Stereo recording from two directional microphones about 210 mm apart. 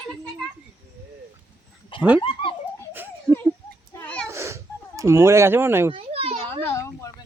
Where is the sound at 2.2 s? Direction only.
25° left (ahead or behind).